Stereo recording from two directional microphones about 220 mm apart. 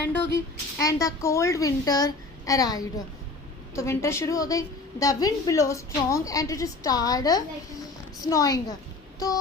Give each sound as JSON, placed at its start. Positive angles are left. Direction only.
{"t": 0.1, "sound": "a woman's voice", "side_deg": 10}
{"t": 9.1, "sound": "music", "side_deg": 15}